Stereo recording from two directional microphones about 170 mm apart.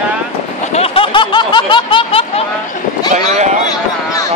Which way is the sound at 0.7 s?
35° left (ahead or behind).